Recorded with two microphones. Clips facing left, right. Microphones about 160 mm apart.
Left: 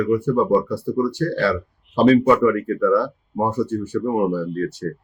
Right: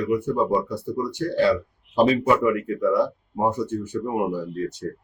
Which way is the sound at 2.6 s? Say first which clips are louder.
Left 3 dB; 20° right (ahead or behind).